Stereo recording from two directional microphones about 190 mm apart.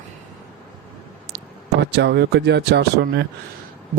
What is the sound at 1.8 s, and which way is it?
Speech, 65° right (ahead or behind).